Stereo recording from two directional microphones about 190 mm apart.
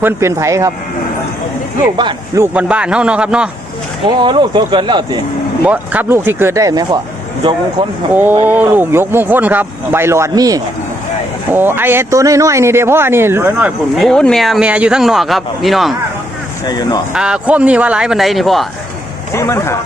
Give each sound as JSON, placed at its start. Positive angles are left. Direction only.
{"t": 0.0, "sound": "a man's voice", "side_deg": -15}
{"t": 2.0, "sound": "speech", "side_deg": -25}
{"t": 2.4, "sound": "speech", "side_deg": -5}
{"t": 4.2, "sound": "speech", "side_deg": -25}
{"t": 5.6, "sound": "a man's voice", "side_deg": -10}
{"t": 8.1, "sound": "a man's voice", "side_deg": -10}
{"t": 16.6, "sound": "speech", "side_deg": 20}
{"t": 17.2, "sound": "speech", "side_deg": -5}
{"t": 19.3, "sound": "speech", "side_deg": 15}